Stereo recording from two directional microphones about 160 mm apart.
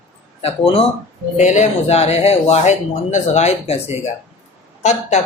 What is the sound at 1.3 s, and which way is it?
A man's voice, 50° left (ahead or behind).